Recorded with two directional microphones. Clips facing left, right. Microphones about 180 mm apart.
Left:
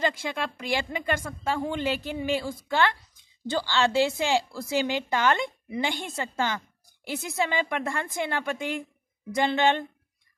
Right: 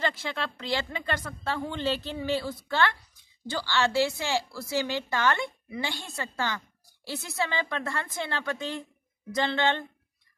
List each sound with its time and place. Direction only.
0.0 s a woman's voice: 15° left (ahead or behind)